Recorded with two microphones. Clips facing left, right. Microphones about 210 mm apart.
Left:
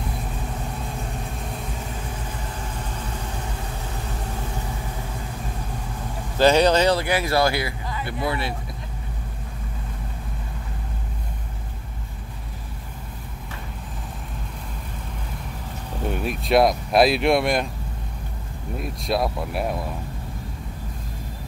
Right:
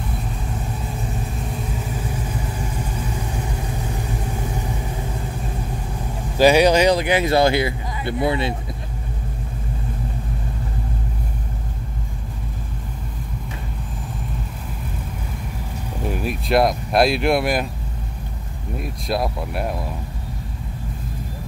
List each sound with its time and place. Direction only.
6.3 s speech: 10° right (ahead or behind)
16.1 s speech: centre (ahead or behind)
18.8 s speech: centre (ahead or behind)